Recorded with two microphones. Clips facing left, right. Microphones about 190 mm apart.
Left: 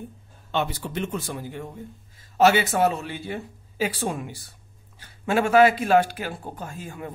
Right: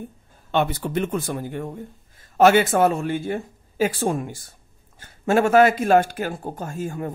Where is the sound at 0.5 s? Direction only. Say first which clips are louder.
Right 5 dB; 55° right (ahead or behind).